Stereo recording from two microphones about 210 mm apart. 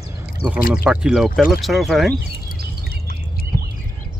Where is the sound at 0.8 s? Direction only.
5° right (ahead or behind).